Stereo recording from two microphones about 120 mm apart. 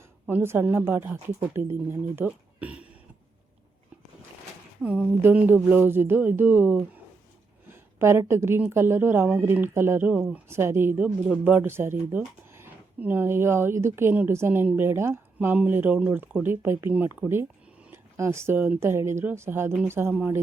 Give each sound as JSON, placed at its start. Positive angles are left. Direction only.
{"t": 0.3, "sound": "speech", "side_deg": -20}
{"t": 5.2, "sound": "speech", "side_deg": -15}
{"t": 7.7, "sound": "a sound", "side_deg": -20}
{"t": 8.3, "sound": "speech", "side_deg": -20}